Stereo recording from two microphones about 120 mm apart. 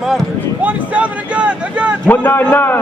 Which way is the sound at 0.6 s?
10° right (ahead or behind).